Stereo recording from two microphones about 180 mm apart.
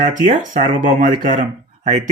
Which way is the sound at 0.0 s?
45° right (ahead or behind).